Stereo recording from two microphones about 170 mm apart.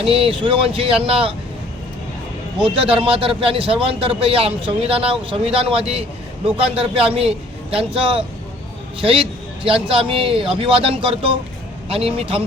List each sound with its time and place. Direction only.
0.0 s a man's voice: 30° right (ahead or behind)
2.6 s a man's voice: 30° right (ahead or behind)